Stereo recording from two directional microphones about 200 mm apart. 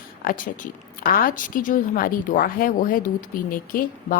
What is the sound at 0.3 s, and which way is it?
A woman's voice, 40° left (ahead or behind).